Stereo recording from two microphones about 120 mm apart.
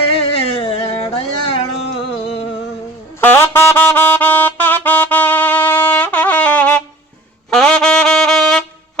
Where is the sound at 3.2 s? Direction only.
15° left (ahead or behind).